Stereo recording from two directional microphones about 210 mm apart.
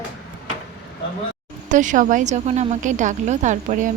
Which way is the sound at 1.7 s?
35° right (ahead or behind).